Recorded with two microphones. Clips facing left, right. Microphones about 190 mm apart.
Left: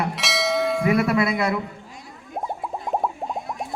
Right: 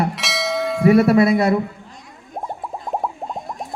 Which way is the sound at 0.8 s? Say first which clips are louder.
Right 10 dB; 35° right (ahead or behind).